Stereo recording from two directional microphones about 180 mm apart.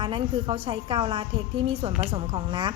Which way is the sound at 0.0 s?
30° right (ahead or behind).